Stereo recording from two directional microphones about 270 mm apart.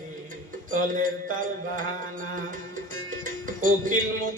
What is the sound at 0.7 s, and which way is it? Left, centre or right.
Music, right.